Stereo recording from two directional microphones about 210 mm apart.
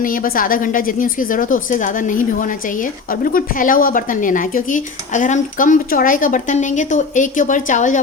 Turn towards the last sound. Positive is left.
turn(degrees=35)  # may be behind; listen again after turning